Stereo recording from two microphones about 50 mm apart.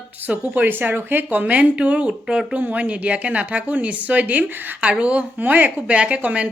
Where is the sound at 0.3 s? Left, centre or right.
Right.